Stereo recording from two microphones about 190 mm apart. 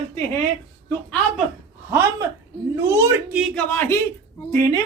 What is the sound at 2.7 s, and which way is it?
Speech, 15° right (ahead or behind).